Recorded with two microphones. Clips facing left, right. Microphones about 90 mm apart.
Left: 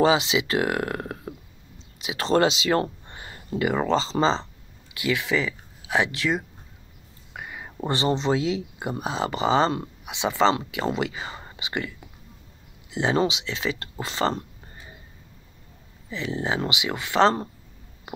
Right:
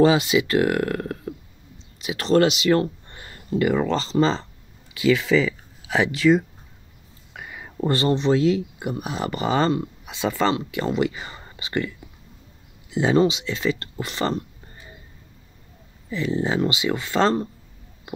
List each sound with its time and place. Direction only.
0.0 s speech: 20° left (ahead or behind)
2.0 s a sound: 20° left (ahead or behind)
2.2 s speech: 30° left (ahead or behind)
3.7 s speech: 30° left (ahead or behind)
5.3 s speech: 15° left (ahead or behind)
7.8 s speech: 25° left (ahead or behind)
8.8 s speech: 30° left (ahead or behind)
12.9 s speech: 20° left (ahead or behind)
16.4 s speech: 15° left (ahead or behind)